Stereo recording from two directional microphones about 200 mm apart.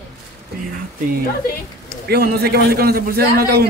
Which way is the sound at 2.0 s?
50° right (ahead or behind).